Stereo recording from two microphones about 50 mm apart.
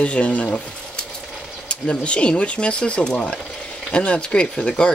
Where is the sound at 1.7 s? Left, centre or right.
Left.